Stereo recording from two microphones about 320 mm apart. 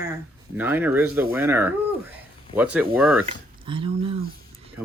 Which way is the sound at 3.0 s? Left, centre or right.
Centre.